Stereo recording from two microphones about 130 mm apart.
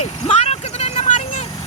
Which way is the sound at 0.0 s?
55° left (ahead or behind).